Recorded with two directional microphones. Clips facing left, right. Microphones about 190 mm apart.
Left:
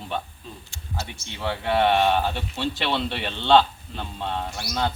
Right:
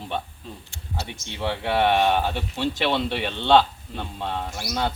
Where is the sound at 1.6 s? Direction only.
10° right (ahead or behind).